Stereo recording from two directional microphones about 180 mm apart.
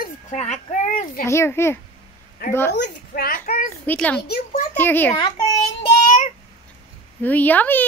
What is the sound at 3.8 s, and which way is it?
A woman's voice, 5° left (ahead or behind).